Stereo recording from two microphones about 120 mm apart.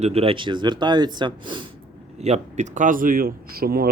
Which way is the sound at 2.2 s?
65° right (ahead or behind).